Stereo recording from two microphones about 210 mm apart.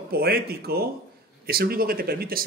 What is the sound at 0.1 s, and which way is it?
A man's voice, 45° right (ahead or behind).